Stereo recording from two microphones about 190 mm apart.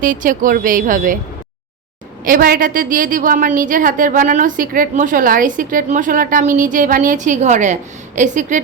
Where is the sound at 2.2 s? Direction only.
45° right (ahead or behind).